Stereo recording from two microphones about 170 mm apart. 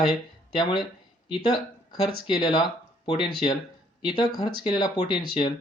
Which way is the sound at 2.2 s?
25° left (ahead or behind).